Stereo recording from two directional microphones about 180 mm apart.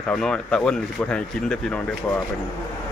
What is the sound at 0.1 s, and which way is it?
Speech, 5° left (ahead or behind).